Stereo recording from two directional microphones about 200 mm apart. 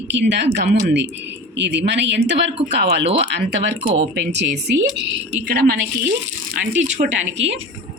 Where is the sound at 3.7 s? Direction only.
30° right (ahead or behind).